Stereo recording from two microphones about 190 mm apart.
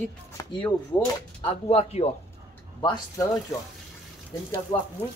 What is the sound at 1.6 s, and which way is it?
Speech, 35° left (ahead or behind).